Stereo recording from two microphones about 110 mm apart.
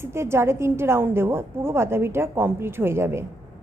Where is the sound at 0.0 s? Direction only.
25° right (ahead or behind).